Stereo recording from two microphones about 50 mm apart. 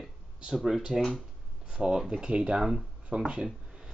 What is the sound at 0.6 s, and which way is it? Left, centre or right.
Speech, centre.